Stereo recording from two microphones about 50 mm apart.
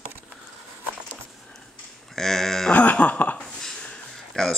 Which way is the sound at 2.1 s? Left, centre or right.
Centre.